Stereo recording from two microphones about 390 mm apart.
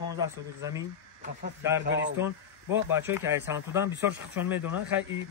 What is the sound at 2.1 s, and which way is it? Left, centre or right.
Speech, centre.